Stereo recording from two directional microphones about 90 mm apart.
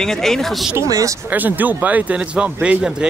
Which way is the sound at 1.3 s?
20° right (ahead or behind).